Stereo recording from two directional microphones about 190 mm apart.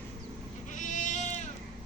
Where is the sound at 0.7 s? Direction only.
40° left (ahead or behind).